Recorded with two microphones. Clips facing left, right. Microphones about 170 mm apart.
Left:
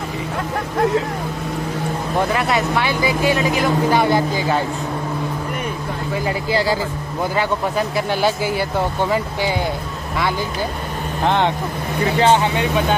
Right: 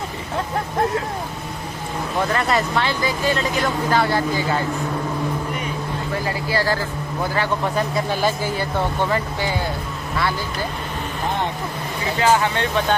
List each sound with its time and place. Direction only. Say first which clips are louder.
2.3 s speech: left 1 dB; 5° left (ahead or behind)
6.2 s speech: left 4 dB; 15° left (ahead or behind)
7.7 s speech: left 2 dB; 5° left (ahead or behind)
11.2 s speech: left 7 dB; 75° left (ahead or behind)
12.2 s speech: left 2 dB; 25° left (ahead or behind)